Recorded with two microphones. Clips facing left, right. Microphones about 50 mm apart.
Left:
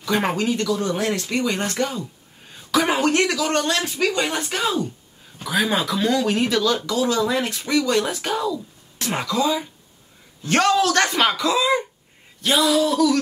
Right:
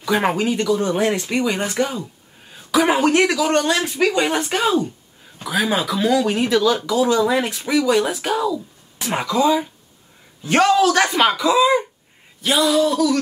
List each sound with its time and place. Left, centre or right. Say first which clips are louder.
0.0 s speech: right 3 dB; centre
4.1 s speech: right 4 dB; centre
5.4 s speech: right 1 dB; centre